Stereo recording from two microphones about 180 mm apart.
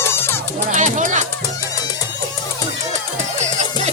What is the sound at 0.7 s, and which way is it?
Music, 45° right (ahead or behind).